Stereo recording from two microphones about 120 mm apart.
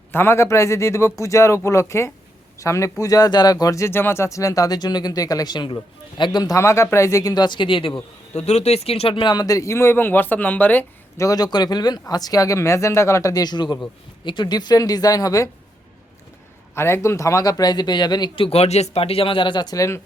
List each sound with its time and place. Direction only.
0.1 s speech: 20° left (ahead or behind); by 7.9 s 45° left (ahead or behind)
8.4 s speech: 65° left (ahead or behind); by 10.8 s 15° left (ahead or behind)
11.2 s speech: 30° left (ahead or behind)
16.7 s speech: 20° left (ahead or behind)